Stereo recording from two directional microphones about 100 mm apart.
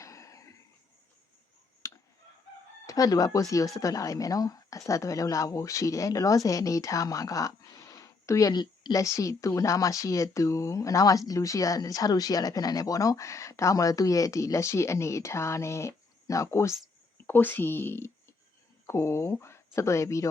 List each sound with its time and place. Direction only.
0.0 s a sound: 30° left (ahead or behind)
1.8 s fowl: 30° left (ahead or behind)
2.8 s speech: 35° left (ahead or behind)